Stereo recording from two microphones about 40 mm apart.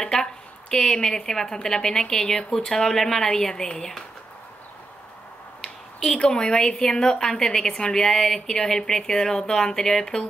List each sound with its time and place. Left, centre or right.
0.0 s a woman's voice: centre
5.6 s a sound: centre
6.1 s a woman's voice: left